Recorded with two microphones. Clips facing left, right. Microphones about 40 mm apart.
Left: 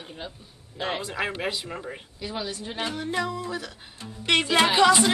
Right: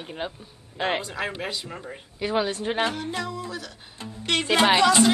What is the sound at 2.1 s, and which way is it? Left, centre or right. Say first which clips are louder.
Speech: right 9 dB; right.